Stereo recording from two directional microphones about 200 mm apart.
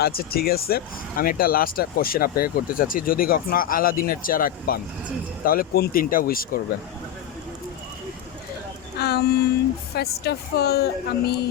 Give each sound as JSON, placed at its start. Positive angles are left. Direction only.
{"t": 0.0, "sound": "speech", "side_deg": 50}
{"t": 9.0, "sound": "speech", "side_deg": 55}